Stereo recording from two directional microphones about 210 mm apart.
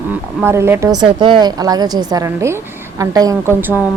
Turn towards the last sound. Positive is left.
turn(degrees=-10)  # may be behind; listen again after turning